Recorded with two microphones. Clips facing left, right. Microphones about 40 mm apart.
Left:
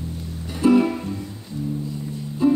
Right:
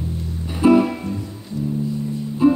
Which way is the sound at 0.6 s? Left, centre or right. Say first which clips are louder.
Right 3 dB; right.